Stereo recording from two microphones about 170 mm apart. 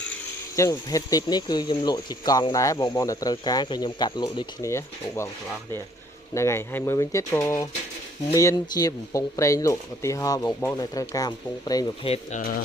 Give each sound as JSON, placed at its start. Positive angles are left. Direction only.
{"t": 0.5, "sound": "speech", "side_deg": 20}
{"t": 6.3, "sound": "speech", "side_deg": 15}
{"t": 12.0, "sound": "speech", "side_deg": 35}
{"t": 12.4, "sound": "speech", "side_deg": 55}